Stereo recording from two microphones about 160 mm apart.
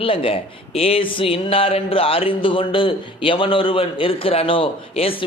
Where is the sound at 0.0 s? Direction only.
35° left (ahead or behind).